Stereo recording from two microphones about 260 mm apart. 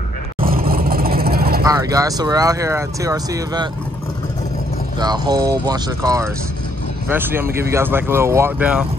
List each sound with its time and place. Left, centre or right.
0.4 s vehicle: right
1.6 s speech: centre
4.9 s speech: centre